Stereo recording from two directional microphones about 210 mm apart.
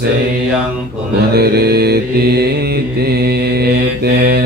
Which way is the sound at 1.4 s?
50° right (ahead or behind).